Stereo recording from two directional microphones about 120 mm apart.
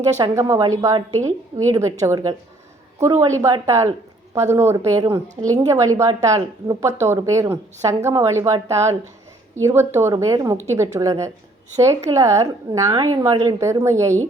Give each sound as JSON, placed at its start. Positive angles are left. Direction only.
{"t": 0.2, "sound": "a woman's voice", "side_deg": -25}